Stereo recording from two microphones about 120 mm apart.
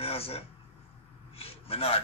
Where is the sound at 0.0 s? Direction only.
55° left (ahead or behind).